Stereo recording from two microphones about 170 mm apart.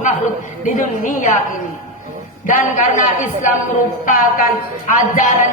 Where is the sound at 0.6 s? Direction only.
50° left (ahead or behind).